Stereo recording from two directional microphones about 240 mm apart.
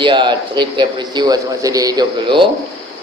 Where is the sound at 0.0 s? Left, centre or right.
Centre.